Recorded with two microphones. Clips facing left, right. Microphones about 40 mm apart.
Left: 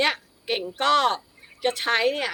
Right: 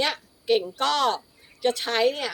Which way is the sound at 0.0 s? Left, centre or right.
Left.